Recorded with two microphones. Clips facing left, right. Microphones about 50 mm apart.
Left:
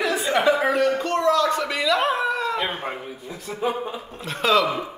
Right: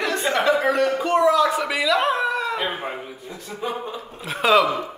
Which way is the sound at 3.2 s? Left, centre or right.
Centre.